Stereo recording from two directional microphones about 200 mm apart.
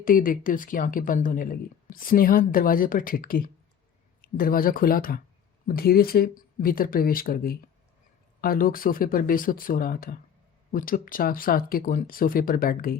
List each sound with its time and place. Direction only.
0.0 s speech: 45° left (ahead or behind)